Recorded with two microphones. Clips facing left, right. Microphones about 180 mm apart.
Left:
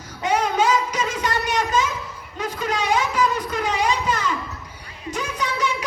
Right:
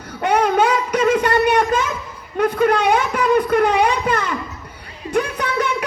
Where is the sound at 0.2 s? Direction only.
60° right (ahead or behind).